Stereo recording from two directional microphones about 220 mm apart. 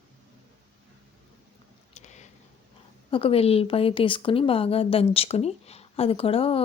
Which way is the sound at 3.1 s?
25° left (ahead or behind).